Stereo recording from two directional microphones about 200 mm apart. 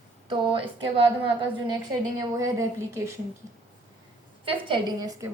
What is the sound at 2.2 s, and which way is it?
Speech, 15° right (ahead or behind).